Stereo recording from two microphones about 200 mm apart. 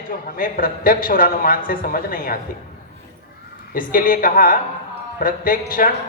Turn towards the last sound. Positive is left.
turn(degrees=45)  # may be behind; listen again after turning